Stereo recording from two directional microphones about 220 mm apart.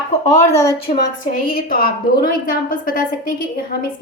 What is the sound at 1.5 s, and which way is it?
A woman's voice, 40° left (ahead or behind).